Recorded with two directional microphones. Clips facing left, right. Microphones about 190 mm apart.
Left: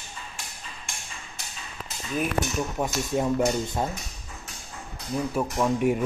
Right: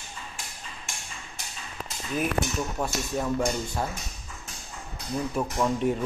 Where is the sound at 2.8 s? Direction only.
20° left (ahead or behind).